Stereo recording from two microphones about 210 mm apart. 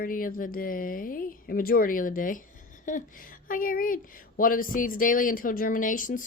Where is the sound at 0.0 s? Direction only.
40° left (ahead or behind).